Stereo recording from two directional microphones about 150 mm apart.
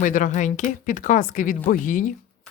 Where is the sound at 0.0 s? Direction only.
60° left (ahead or behind).